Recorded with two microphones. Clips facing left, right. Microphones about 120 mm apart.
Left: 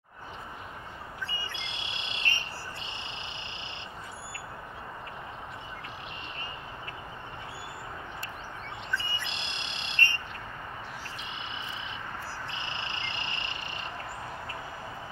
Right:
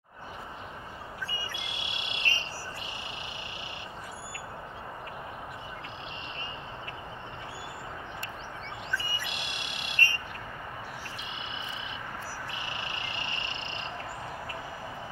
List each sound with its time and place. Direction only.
1.3 s bird: 25° left (ahead or behind)
8.9 s bird: 25° left (ahead or behind)
12.5 s frog: 25° left (ahead or behind)